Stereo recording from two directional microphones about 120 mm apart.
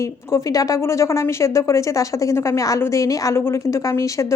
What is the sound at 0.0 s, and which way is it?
Speech, 25° left (ahead or behind).